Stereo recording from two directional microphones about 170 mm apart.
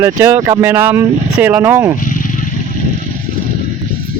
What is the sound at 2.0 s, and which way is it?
Vehicle, 55° left (ahead or behind).